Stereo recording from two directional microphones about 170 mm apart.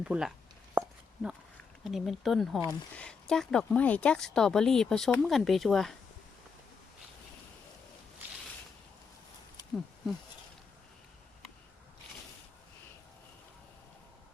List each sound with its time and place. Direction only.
0.0 s speech: 5° right (ahead or behind)